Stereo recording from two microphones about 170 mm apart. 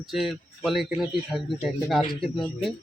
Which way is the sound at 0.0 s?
Centre (ahead or behind).